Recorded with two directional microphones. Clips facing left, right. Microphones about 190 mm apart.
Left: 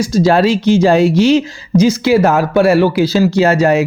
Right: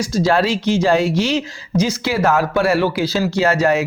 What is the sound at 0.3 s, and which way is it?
Speech, 15° left (ahead or behind).